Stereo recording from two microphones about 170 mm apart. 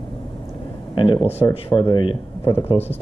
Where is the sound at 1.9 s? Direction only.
30° left (ahead or behind).